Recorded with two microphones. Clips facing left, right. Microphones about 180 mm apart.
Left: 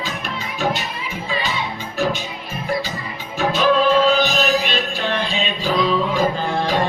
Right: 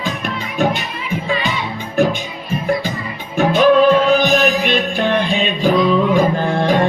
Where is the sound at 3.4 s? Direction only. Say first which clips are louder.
Right 6 dB; 55° right (ahead or behind).